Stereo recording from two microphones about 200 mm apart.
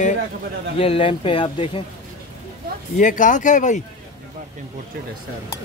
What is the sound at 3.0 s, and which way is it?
Speech, 40° left (ahead or behind).